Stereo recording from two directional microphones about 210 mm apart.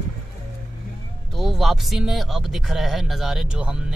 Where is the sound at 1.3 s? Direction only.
Centre (ahead or behind).